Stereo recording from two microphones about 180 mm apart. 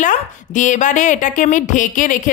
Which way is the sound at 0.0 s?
45° left (ahead or behind).